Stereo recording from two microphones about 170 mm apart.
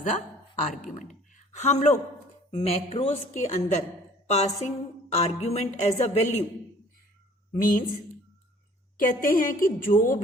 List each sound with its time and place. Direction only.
0.0 s a woman's voice: 50° left (ahead or behind)
7.6 s a woman's voice: 55° left (ahead or behind)
9.0 s a woman's voice: 55° left (ahead or behind)